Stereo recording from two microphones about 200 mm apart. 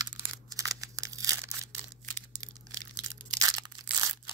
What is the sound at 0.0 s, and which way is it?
Tearing, 20° right (ahead or behind).